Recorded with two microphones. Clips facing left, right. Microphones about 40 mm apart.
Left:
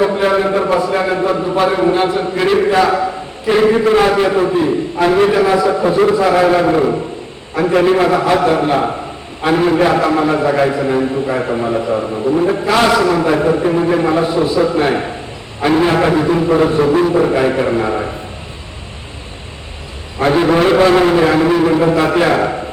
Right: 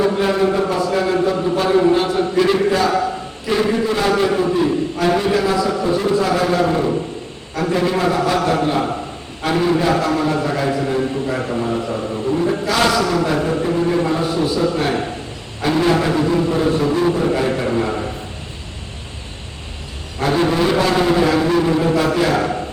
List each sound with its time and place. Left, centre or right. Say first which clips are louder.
0.2 s a man's voice: left 3 dB; left
20.1 s a man's voice: left 5 dB; left